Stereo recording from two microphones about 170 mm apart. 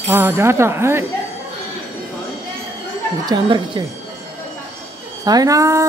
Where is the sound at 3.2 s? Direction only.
25° right (ahead or behind).